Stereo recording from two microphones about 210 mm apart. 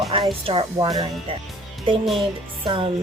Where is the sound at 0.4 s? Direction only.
25° right (ahead or behind).